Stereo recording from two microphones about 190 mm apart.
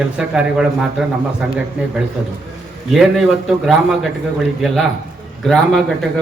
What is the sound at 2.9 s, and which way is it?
Speech, centre (ahead or behind).